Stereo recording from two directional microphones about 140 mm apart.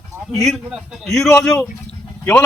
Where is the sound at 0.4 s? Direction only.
Centre (ahead or behind).